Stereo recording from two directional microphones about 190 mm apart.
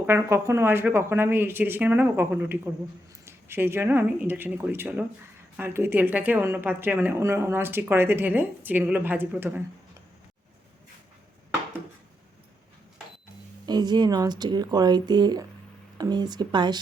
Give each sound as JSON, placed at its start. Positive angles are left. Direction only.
{"t": 0.0, "sound": "speech", "side_deg": -10}
{"t": 13.7, "sound": "speech", "side_deg": -20}